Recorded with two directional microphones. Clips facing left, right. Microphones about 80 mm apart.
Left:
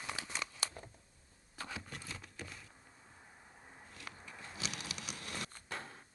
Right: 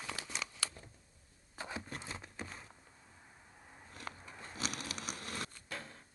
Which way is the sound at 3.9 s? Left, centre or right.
Right.